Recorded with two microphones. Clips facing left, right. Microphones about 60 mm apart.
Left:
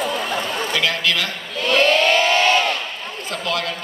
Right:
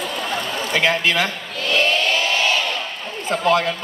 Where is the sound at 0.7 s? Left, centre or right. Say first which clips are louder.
Right 4 dB; right.